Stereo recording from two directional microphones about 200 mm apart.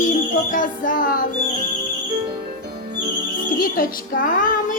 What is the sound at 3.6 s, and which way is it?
Speech, 45° left (ahead or behind).